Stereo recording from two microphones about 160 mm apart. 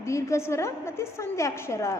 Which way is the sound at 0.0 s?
20° left (ahead or behind).